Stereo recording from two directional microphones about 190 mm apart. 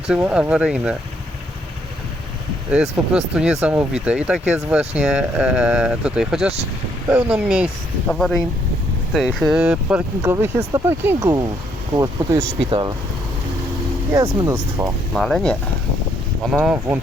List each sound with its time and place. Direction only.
0.3 s speech: 5° right (ahead or behind)
2.7 s speech: 5° right (ahead or behind); by 12.9 s 25° right (ahead or behind)
14.1 s speech: 15° right (ahead or behind)
15.1 s speech: centre (ahead or behind)